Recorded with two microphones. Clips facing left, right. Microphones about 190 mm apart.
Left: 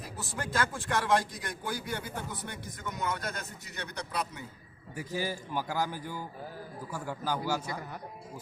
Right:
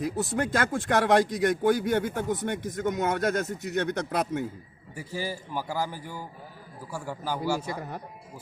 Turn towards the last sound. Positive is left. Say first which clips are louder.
# right 3 dB
turn(degrees=-10)  # may be behind; listen again after turning